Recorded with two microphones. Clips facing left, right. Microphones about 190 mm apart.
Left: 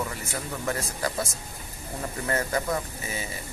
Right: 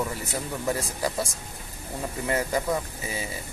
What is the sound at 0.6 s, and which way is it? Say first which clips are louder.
Speech: right 2 dB; 15° right (ahead or behind).